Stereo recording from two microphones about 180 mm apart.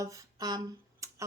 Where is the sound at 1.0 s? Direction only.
15° right (ahead or behind).